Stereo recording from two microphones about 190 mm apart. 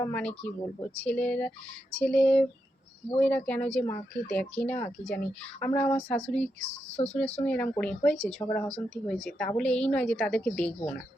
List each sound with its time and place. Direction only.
0.0 s a woman's voice: 10° left (ahead or behind)
6.9 s speech: 35° left (ahead or behind)
7.4 s a woman's voice: 5° left (ahead or behind)